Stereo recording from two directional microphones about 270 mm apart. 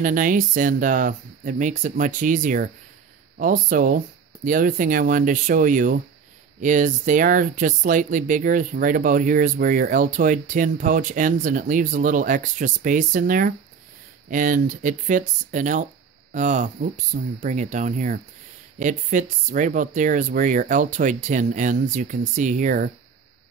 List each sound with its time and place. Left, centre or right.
0.0 s speech: right